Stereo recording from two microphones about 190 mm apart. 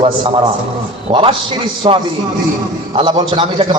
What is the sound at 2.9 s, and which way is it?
Speech, 25° right (ahead or behind).